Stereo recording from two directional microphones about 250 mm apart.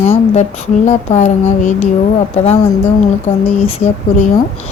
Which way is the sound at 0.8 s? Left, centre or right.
Left.